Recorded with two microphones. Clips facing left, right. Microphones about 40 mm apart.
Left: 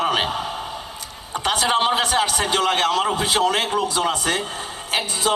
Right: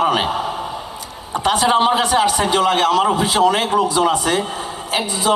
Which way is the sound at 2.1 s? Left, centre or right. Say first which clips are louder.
Right 4 dB; right.